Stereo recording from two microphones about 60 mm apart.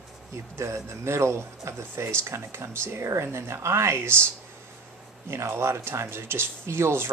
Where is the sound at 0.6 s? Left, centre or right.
Right.